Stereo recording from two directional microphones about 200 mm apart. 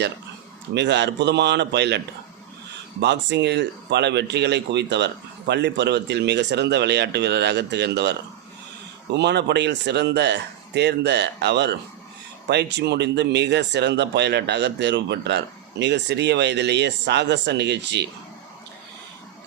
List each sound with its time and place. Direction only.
0.7 s speech: 60° right (ahead or behind)
3.0 s speech: 60° right (ahead or behind)
9.1 s speech: 60° right (ahead or behind)